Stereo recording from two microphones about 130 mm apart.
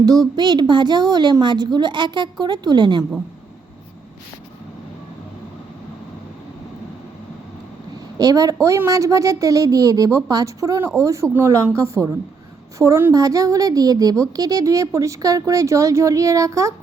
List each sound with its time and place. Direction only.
0.0 s a woman's voice: 30° right (ahead or behind)
8.2 s a woman's voice: 25° right (ahead or behind)